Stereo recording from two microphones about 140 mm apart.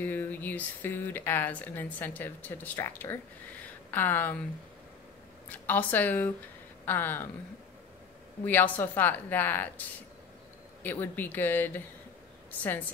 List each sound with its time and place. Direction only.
0.0 s speech: 15° left (ahead or behind)
3.6 s a sound: 15° left (ahead or behind)
5.5 s speech: 10° left (ahead or behind)
8.5 s speech: 10° left (ahead or behind)
10.8 s a woman's voice: 15° left (ahead or behind)